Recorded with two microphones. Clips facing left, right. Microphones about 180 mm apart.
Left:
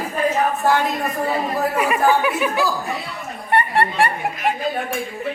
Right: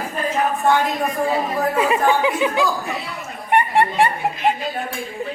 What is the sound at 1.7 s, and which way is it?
A woman's voice, 25° right (ahead or behind).